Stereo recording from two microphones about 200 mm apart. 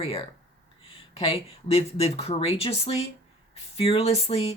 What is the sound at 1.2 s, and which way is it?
Speech, 30° left (ahead or behind).